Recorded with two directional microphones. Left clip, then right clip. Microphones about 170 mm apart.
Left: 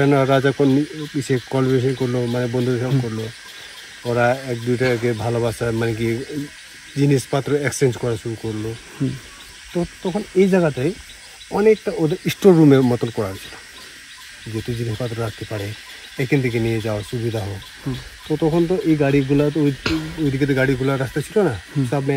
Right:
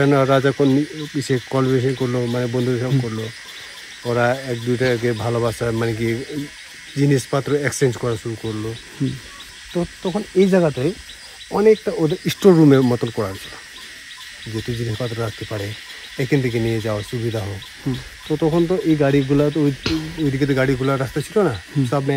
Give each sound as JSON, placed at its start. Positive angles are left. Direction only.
{"t": 0.0, "sound": "speech", "side_deg": -5}
{"t": 10.0, "sound": "speech", "side_deg": 0}
{"t": 14.5, "sound": "speech", "side_deg": -5}
{"t": 19.8, "sound": "speech", "side_deg": -20}
{"t": 20.2, "sound": "speech", "side_deg": 0}